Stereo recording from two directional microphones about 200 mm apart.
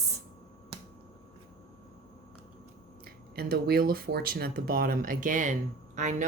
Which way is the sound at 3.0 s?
50° right (ahead or behind).